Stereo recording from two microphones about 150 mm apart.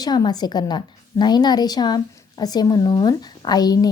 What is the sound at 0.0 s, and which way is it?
A woman's voice, 25° left (ahead or behind).